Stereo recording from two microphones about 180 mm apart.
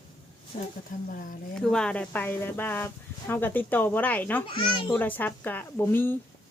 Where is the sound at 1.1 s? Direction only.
50° left (ahead or behind).